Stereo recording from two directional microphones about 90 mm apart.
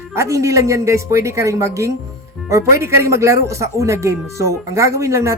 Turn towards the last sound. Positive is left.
turn(degrees=-35)  # may be behind; listen again after turning